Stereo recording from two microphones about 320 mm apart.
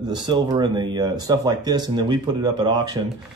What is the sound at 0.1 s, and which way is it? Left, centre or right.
Speech, centre.